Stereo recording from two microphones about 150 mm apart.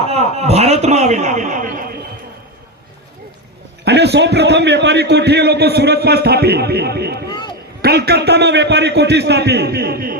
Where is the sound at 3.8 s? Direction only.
90° right.